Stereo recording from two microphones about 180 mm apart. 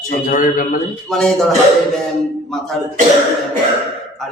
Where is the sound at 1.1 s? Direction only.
Centre (ahead or behind).